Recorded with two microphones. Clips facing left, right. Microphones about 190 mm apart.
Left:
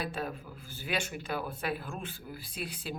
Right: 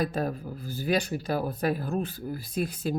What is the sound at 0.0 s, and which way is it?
Speech, 40° right (ahead or behind).